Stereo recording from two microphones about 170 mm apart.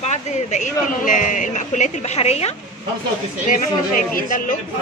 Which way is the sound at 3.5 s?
50° left (ahead or behind).